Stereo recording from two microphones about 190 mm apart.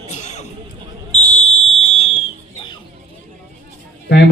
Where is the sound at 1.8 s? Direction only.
35° left (ahead or behind).